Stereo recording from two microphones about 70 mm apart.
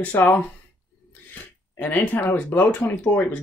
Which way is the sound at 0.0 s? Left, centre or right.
Left.